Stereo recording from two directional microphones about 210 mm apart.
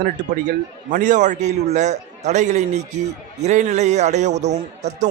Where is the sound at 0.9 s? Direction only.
35° right (ahead or behind).